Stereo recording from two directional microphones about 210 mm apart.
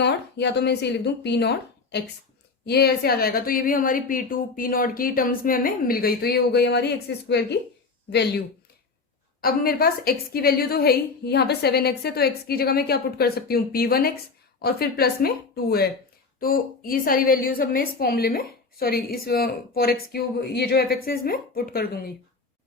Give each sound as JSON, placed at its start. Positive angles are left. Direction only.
{"t": 0.0, "sound": "a woman's voice", "side_deg": 55}
{"t": 9.4, "sound": "a woman's voice", "side_deg": 45}